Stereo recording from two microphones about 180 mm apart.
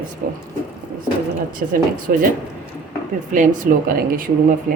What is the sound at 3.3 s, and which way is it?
Speech, 45° right (ahead or behind).